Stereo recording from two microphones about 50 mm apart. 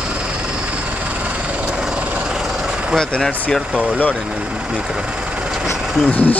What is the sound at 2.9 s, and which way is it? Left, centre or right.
Speech, centre.